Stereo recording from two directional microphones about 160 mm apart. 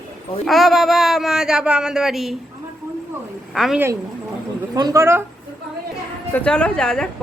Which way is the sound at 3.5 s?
Centre (ahead or behind).